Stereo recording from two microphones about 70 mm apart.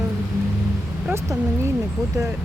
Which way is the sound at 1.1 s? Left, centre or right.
Right.